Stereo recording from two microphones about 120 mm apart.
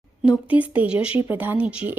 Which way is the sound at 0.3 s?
10° right (ahead or behind).